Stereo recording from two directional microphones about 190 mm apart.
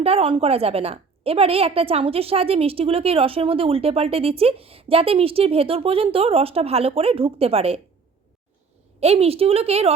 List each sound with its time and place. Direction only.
0.0 s a woman's voice: 30° right (ahead or behind)
9.0 s a woman's voice: 30° right (ahead or behind)